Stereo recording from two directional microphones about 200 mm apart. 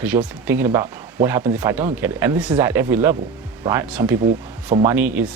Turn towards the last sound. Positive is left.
turn(degrees=-10)  # may be behind; listen again after turning